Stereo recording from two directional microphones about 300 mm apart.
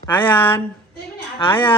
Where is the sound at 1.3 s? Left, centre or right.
Centre.